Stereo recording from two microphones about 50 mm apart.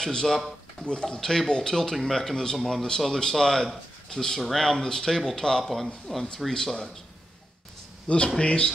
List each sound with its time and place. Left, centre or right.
0.0 s speech: centre
8.4 s speech: left